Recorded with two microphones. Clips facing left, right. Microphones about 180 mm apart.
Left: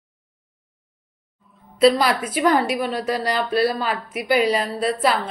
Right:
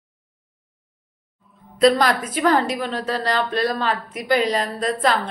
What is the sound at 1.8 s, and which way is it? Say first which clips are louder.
Speech: even; 5° left (ahead or behind).